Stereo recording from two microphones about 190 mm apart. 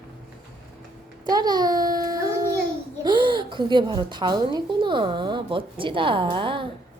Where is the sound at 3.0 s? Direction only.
25° right (ahead or behind).